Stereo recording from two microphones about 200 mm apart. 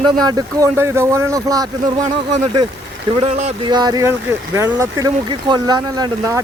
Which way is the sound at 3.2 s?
25° right (ahead or behind).